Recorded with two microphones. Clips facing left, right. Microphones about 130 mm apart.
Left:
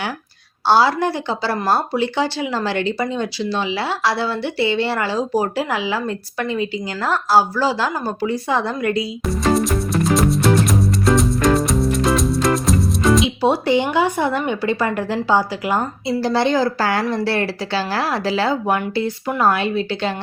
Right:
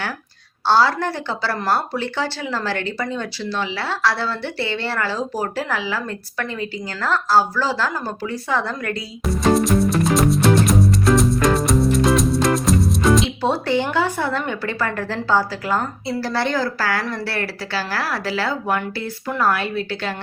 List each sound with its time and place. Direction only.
0.7 s speech: 15° left (ahead or behind)
9.2 s music: centre (ahead or behind)
13.4 s speech: 15° left (ahead or behind)